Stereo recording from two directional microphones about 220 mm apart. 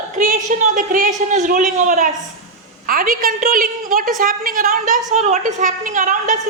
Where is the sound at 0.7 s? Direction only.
40° right (ahead or behind).